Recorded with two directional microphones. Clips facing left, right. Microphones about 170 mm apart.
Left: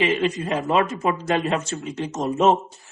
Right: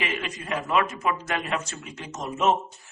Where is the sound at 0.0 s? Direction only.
30° left (ahead or behind).